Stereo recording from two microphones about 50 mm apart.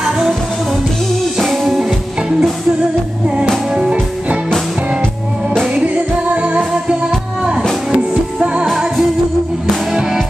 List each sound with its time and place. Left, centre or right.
0.0 s music: centre
1.4 s music: centre
6.3 s music: right
7.9 s music: centre
8.7 s music: centre